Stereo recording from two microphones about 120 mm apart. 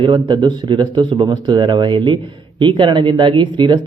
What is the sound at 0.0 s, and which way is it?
A man's voice, 40° right (ahead or behind).